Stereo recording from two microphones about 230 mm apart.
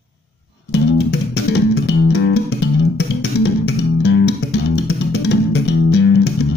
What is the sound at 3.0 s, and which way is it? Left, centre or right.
Bass guitar, left.